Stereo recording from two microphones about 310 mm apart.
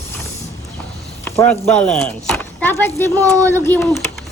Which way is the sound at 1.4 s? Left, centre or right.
Centre.